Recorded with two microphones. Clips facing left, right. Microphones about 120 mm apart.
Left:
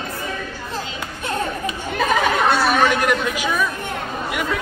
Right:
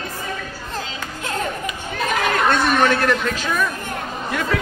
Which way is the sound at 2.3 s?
5° left (ahead or behind).